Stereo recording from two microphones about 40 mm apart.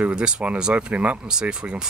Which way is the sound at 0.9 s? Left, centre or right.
Right.